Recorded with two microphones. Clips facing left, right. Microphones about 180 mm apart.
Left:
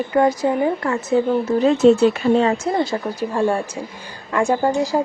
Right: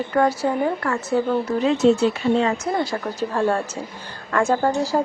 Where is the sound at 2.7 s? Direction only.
25° left (ahead or behind).